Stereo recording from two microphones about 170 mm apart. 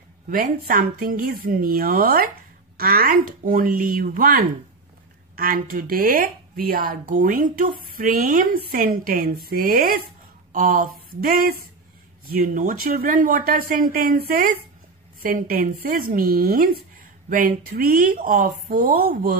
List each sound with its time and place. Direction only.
0.3 s speech: 55° right (ahead or behind)
10.5 s a sound: 50° right (ahead or behind)
12.4 s speech: 55° right (ahead or behind)